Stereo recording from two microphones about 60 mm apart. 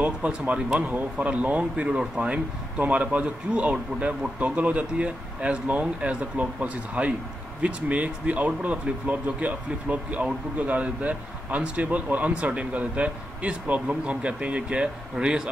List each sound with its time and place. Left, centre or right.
0.0 s speech: right